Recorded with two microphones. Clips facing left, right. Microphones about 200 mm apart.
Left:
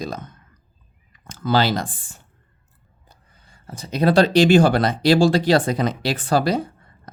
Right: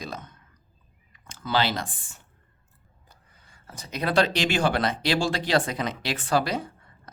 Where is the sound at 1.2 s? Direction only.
45° left (ahead or behind).